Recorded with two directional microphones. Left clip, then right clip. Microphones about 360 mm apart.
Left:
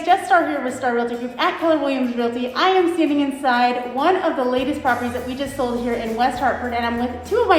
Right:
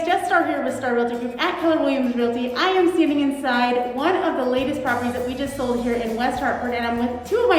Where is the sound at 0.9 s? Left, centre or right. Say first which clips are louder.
Left 1 dB; centre.